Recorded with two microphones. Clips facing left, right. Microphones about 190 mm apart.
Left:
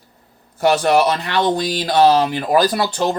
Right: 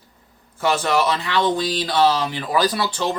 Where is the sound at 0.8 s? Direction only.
60° left (ahead or behind).